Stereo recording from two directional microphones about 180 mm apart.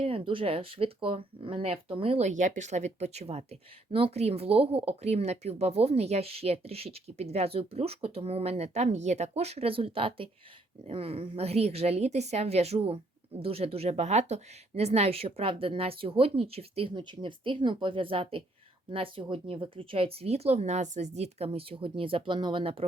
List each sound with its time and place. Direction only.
0.0 s a woman's voice: 30° right (ahead or behind)